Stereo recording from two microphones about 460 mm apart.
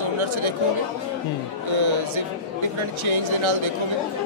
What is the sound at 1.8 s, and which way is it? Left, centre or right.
Speech, right.